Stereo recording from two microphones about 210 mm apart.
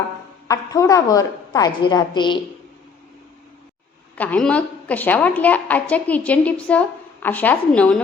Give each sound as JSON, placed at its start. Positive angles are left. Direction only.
{"t": 0.4, "sound": "a woman's voice", "side_deg": 15}
{"t": 4.2, "sound": "a woman's voice", "side_deg": 5}